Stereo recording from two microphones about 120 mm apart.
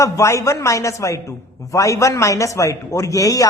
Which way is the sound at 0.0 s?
25° left (ahead or behind).